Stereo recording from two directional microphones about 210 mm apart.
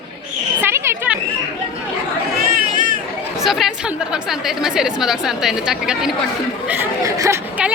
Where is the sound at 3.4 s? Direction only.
Centre (ahead or behind).